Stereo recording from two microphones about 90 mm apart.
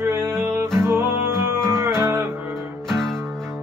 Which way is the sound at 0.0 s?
25° right (ahead or behind).